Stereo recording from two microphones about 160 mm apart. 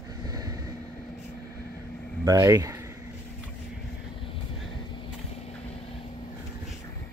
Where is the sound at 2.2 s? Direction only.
20° right (ahead or behind).